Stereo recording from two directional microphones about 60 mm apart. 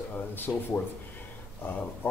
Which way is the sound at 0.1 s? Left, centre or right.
Left.